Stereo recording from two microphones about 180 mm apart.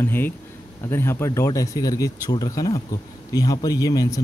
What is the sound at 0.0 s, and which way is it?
Speech, 10° left (ahead or behind).